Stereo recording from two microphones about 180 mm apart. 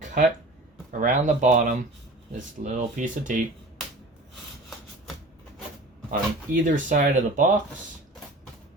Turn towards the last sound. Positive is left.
turn(degrees=-45)  # may be behind; listen again after turning